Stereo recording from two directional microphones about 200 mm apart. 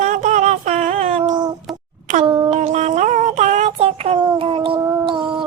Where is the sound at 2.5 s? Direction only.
35° right (ahead or behind).